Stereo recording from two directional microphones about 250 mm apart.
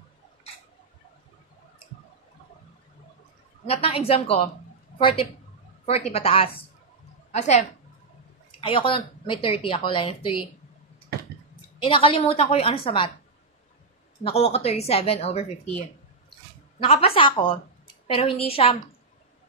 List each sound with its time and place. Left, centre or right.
3.6 s a woman's voice: left
11.8 s speech: left
14.2 s speech: left
16.8 s speech: left